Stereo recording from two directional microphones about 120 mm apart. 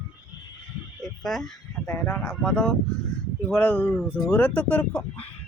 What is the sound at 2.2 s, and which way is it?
Speech, 5° left (ahead or behind).